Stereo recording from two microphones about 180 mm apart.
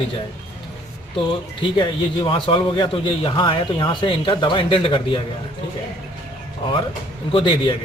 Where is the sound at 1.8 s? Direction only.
25° left (ahead or behind).